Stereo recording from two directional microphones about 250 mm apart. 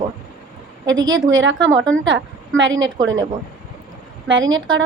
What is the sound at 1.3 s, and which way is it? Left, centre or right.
A woman's voice, right.